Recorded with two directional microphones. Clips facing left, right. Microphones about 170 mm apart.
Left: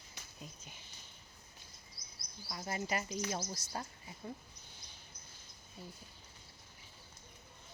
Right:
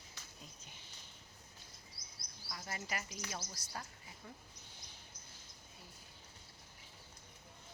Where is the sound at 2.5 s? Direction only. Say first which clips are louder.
Left 6 dB; 25° left (ahead or behind).